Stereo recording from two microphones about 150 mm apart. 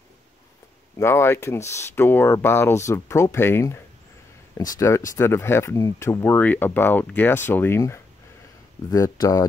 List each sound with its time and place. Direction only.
0.9 s speech: 15° left (ahead or behind)